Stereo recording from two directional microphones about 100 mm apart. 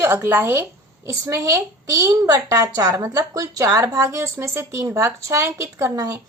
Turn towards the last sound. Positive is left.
turn(degrees=-35)  # may be behind; listen again after turning